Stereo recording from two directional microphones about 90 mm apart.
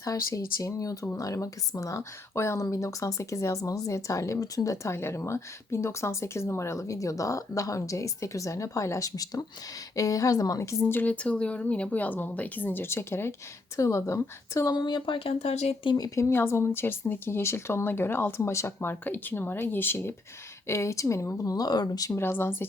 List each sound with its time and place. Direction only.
0.0 s speech: 40° left (ahead or behind)
14.8 s speech: 55° left (ahead or behind); by 15.4 s 80° left
16.0 s speech: 35° left (ahead or behind)
22.1 s speech: 25° left (ahead or behind)